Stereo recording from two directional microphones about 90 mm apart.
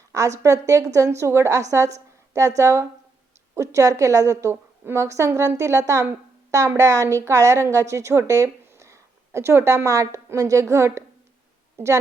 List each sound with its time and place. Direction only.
0.1 s a woman's voice: 35° right (ahead or behind)